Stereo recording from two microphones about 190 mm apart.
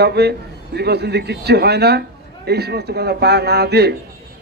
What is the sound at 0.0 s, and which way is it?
A man's voice, 60° right (ahead or behind).